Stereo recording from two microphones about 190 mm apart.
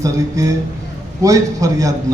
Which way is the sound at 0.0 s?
15° right (ahead or behind).